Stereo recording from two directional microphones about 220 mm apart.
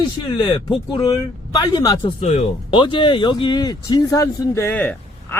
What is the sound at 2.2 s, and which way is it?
A man's voice, 30° left (ahead or behind).